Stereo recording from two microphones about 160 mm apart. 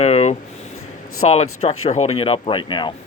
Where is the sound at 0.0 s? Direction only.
45° left (ahead or behind).